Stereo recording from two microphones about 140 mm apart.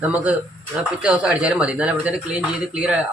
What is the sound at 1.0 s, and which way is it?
Speech, 5° right (ahead or behind).